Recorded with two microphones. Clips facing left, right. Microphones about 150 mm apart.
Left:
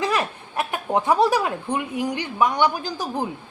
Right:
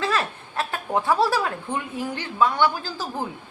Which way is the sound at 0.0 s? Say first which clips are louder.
Left 2 dB; 15° left (ahead or behind).